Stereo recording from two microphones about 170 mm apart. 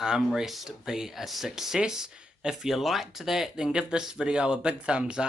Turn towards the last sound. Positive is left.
turn(degrees=-5)  # may be behind; listen again after turning